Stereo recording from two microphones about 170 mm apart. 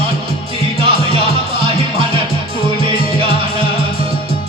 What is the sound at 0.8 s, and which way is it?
Music, 30° right (ahead or behind).